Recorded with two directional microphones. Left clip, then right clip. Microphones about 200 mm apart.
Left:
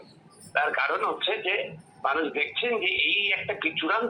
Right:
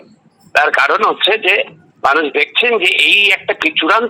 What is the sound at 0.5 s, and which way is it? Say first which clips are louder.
A man's voice: right 14 dB; 45° right (ahead or behind).